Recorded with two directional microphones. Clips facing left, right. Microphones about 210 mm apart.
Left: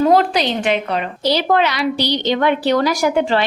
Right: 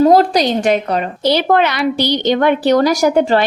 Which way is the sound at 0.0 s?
40° right (ahead or behind).